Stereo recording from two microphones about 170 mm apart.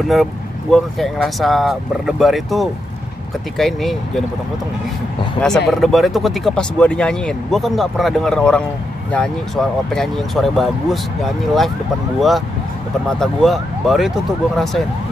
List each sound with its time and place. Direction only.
0.1 s speech: centre (ahead or behind)
5.7 s speech: centre (ahead or behind)
12.2 s speech: centre (ahead or behind)